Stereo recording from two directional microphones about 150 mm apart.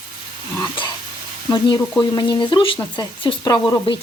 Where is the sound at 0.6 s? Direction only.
30° left (ahead or behind).